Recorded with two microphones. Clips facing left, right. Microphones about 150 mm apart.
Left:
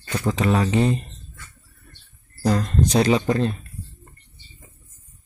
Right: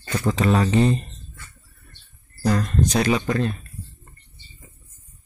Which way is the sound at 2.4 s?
20° left (ahead or behind).